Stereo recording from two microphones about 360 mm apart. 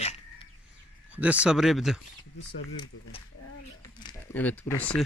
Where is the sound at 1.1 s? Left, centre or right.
Centre.